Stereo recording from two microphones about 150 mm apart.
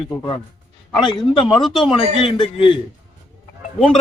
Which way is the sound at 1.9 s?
35° left (ahead or behind).